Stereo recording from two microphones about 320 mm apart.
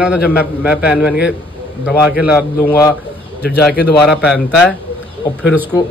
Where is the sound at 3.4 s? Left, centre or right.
Left.